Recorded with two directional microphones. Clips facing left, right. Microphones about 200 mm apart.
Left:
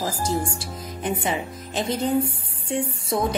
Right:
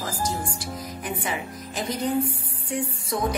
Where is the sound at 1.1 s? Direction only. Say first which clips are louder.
Left 5 dB; 25° left (ahead or behind).